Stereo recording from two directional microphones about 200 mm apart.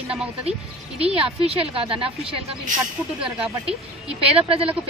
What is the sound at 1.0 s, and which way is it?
A woman's voice, 30° right (ahead or behind).